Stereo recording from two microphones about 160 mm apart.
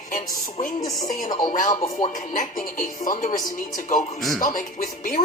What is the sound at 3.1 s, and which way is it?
Speech, 55° left (ahead or behind).